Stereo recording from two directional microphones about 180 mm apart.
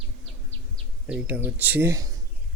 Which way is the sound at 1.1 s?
10° right (ahead or behind).